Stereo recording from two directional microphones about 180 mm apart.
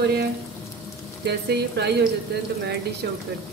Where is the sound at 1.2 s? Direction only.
65° right (ahead or behind).